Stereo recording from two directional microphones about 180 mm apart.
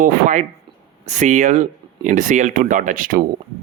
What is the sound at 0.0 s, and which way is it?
Speech, 45° right (ahead or behind).